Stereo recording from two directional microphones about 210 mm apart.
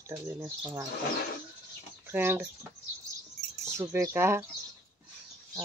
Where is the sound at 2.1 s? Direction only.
10° right (ahead or behind).